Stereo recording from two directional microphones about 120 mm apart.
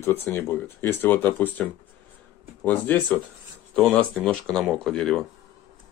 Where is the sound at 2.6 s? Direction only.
15° left (ahead or behind).